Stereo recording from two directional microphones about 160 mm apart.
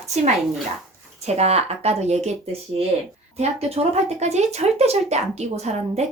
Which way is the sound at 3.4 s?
40° right (ahead or behind).